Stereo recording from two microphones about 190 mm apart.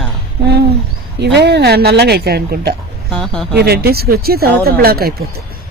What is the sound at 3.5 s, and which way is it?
Speech, 55° right (ahead or behind).